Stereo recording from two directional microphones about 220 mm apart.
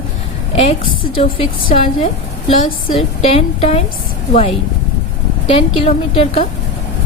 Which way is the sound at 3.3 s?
25° left (ahead or behind).